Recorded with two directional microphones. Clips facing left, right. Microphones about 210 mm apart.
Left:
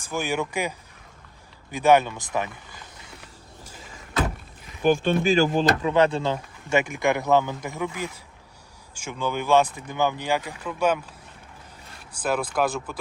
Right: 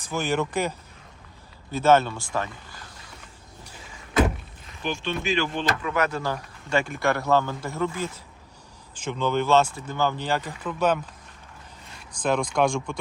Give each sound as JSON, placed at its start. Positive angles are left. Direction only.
{"t": 0.1, "sound": "speech", "side_deg": 10}
{"t": 4.8, "sound": "speech", "side_deg": 50}
{"t": 5.8, "sound": "speech", "side_deg": 30}
{"t": 12.1, "sound": "speech", "side_deg": 5}